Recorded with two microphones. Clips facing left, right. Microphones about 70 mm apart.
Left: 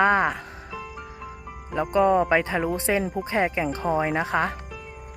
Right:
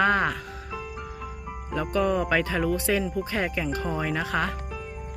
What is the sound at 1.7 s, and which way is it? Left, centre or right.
Speech, left.